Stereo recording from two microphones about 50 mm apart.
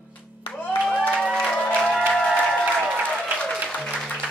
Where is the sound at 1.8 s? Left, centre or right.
Centre.